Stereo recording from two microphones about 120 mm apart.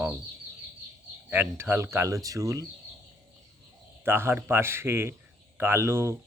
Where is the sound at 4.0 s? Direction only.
20° right (ahead or behind).